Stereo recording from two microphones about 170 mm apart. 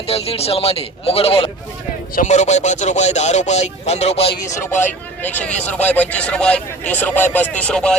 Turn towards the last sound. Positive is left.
turn(degrees=5)  # may be behind; listen again after turning